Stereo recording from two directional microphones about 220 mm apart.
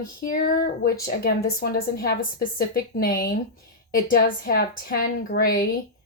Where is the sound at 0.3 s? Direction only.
40° left (ahead or behind).